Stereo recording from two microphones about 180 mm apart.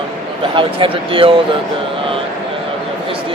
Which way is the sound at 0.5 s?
30° right (ahead or behind).